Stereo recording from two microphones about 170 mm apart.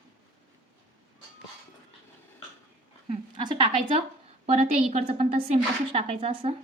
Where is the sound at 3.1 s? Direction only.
30° right (ahead or behind).